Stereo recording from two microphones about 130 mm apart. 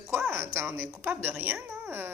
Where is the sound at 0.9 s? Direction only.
5° right (ahead or behind).